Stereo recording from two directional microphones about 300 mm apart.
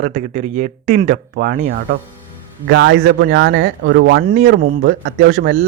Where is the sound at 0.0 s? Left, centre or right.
Right.